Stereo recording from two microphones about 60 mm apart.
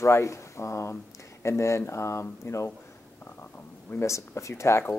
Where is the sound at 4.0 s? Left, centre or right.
Left.